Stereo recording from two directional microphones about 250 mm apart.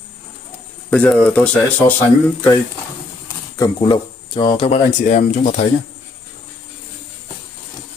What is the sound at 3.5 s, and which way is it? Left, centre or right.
Speech, centre.